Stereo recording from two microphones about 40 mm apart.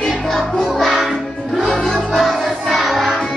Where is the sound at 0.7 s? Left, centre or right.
Centre.